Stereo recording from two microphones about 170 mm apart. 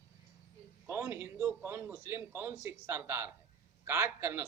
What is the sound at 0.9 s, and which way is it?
A man's voice, 15° right (ahead or behind).